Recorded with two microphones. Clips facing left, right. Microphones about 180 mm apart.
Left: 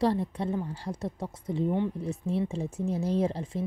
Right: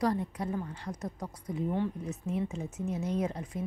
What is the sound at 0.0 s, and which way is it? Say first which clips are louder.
Speech: left 3 dB; 30° left (ahead or behind).